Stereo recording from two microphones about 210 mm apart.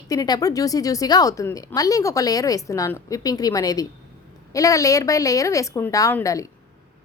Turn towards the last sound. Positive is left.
turn(degrees=15)  # may be behind; listen again after turning